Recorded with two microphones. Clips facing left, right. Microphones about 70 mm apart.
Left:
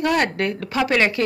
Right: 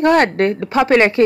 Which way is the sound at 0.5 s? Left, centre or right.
Right.